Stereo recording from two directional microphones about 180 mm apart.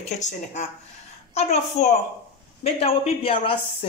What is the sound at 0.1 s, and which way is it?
Speech, 40° left (ahead or behind).